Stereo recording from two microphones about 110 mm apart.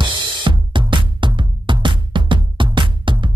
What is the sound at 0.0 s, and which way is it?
Music, 45° right (ahead or behind).